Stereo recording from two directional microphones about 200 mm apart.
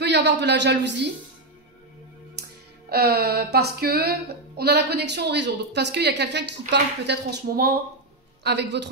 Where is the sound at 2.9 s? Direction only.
50° right (ahead or behind).